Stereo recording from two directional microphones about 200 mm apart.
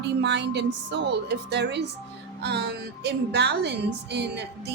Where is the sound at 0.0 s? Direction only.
60° right (ahead or behind).